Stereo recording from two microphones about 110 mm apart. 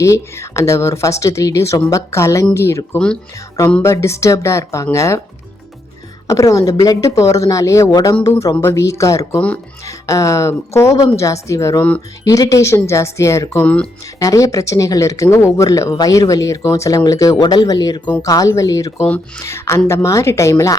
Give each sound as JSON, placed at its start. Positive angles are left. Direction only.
{"t": 0.0, "sound": "a woman's voice", "side_deg": 25}
{"t": 6.2, "sound": "a woman's voice", "side_deg": 30}